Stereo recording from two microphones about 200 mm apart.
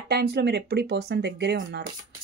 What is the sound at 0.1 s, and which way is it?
Speech, 55° right (ahead or behind).